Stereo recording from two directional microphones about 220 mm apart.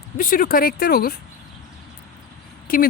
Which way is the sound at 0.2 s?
40° left (ahead or behind).